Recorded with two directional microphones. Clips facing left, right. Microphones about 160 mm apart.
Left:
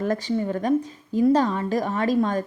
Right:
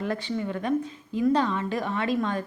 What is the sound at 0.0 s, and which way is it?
A woman's voice, 40° left (ahead or behind).